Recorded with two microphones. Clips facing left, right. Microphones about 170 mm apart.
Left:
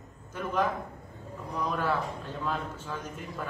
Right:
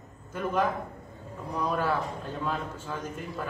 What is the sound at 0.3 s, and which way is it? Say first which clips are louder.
A man's voice: right 2 dB; 10° right (ahead or behind).